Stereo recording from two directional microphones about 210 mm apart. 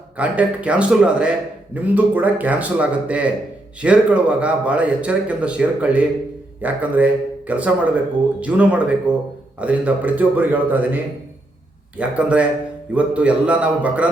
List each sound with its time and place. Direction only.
0.2 s a man's voice: 5° right (ahead or behind)